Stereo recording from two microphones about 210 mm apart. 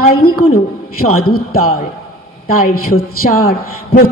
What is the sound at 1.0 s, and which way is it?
Speech, 90° left.